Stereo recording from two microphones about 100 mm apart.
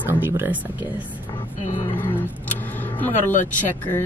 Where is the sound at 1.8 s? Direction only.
20° left (ahead or behind).